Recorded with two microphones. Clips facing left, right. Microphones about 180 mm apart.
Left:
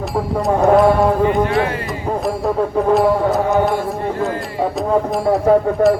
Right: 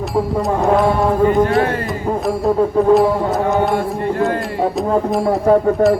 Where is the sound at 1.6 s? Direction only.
45° right (ahead or behind).